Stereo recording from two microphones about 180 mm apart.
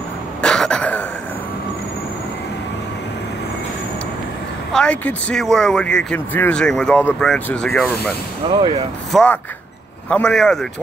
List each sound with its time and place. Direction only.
0.4 s cough: 5° left (ahead or behind)
4.7 s speech: 5° left (ahead or behind)
8.5 s speech: 25° right (ahead or behind)
9.1 s speech: 5° left (ahead or behind)